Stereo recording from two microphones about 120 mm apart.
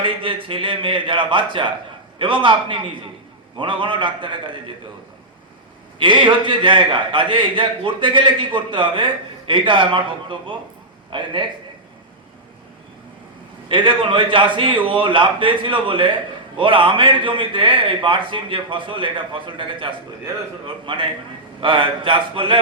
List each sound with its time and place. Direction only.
0.0 s a man's voice: 45° right (ahead or behind)
6.0 s a man's voice: 45° right (ahead or behind)
13.7 s a man's voice: 45° right (ahead or behind)